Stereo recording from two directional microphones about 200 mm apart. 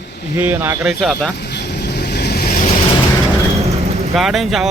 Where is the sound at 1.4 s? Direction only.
55° left (ahead or behind).